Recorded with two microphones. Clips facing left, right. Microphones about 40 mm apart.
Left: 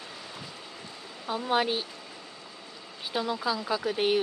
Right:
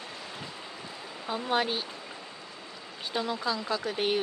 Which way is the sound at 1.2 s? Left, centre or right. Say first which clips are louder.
Left 2 dB; centre.